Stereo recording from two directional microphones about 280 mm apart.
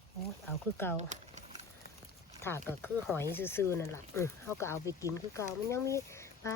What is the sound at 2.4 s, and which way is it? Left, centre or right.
Speech, centre.